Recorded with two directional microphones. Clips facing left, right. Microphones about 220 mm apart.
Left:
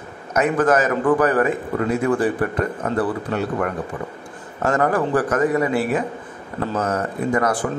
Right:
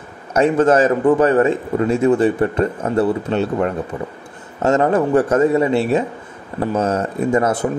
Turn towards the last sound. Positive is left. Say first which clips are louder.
# right 4 dB
turn(degrees=-25)  # may be behind; listen again after turning